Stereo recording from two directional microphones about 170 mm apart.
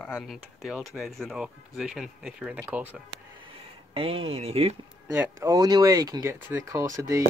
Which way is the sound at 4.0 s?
35° right (ahead or behind).